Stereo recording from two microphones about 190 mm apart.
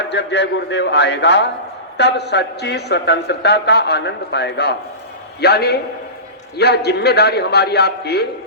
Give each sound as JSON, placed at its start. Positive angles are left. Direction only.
{"t": 0.1, "sound": "a woman's voice", "side_deg": 65}